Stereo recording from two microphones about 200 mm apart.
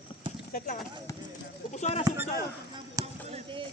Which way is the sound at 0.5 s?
45° left (ahead or behind).